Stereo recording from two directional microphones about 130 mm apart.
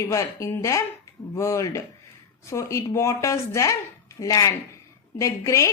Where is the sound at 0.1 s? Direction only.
25° left (ahead or behind).